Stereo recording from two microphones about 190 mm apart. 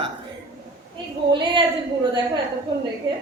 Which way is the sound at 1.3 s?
25° right (ahead or behind).